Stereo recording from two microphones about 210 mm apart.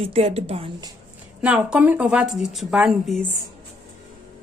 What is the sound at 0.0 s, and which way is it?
Speech, 30° right (ahead or behind).